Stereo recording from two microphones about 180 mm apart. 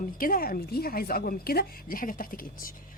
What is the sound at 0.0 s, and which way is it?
A woman's voice, 50° left (ahead or behind).